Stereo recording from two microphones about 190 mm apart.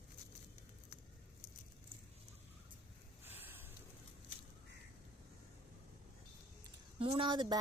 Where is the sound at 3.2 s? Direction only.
10° right (ahead or behind).